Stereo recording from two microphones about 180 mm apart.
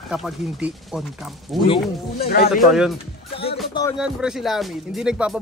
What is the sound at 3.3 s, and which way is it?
Music, 30° left (ahead or behind).